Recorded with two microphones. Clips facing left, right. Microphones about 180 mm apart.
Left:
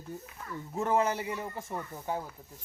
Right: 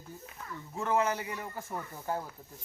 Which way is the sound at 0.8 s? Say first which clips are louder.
Left 2 dB; 35° left (ahead or behind).